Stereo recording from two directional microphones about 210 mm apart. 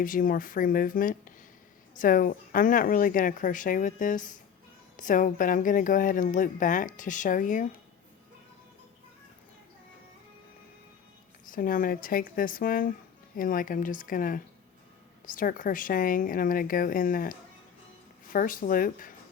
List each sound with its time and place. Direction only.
0.0 s a woman's voice: 40° left (ahead or behind)
11.4 s a woman's voice: 40° left (ahead or behind)
18.3 s a woman's voice: 40° left (ahead or behind)